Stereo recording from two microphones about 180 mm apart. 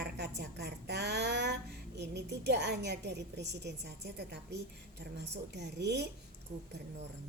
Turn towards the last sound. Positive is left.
turn(degrees=-70)  # may be behind; listen again after turning